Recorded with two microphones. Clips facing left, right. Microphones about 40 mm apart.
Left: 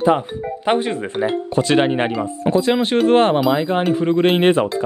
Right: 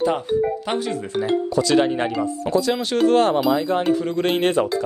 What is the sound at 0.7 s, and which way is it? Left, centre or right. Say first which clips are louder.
Speech: left 6 dB; left.